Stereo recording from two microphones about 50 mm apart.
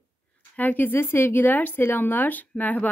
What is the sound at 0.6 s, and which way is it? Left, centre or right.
A woman's voice, left.